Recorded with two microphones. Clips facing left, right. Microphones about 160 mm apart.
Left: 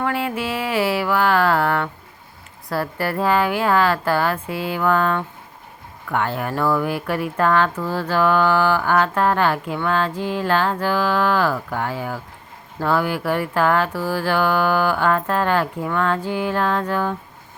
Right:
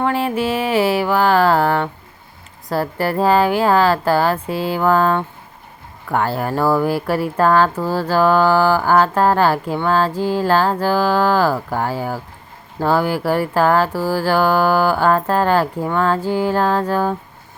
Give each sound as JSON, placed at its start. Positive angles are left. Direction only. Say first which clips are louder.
{"t": 0.0, "sound": "music", "louder": "right 5 dB", "side_deg": -30}
{"t": 2.6, "sound": "speech", "louder": "right 4 dB", "side_deg": -30}